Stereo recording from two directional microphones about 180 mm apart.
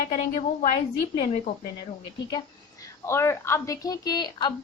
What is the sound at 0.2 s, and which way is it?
A woman's voice, 35° left (ahead or behind).